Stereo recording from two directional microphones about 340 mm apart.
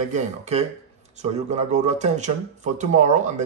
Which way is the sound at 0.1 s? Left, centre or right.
Centre.